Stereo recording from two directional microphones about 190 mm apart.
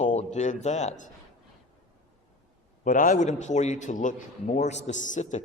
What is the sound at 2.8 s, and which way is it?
A man's voice, 45° left (ahead or behind).